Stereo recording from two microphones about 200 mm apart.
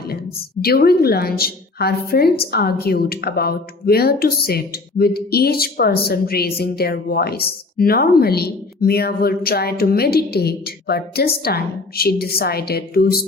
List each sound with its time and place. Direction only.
0.6 s a woman's voice: 50° left (ahead or behind)